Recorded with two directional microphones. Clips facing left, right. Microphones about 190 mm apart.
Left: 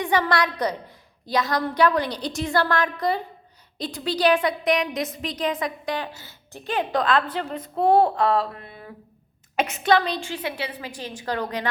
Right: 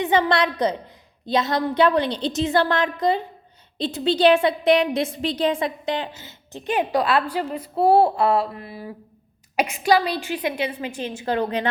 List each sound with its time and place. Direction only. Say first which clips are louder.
0.0 s a woman's voice: right 3 dB; 20° right (ahead or behind)
7.3 s a sound: right 3 dB; 5° right (ahead or behind)
10.7 s a woman's voice: right 5 dB; 25° right (ahead or behind)